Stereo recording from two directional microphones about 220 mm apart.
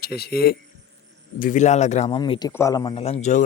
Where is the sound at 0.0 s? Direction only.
45° left (ahead or behind).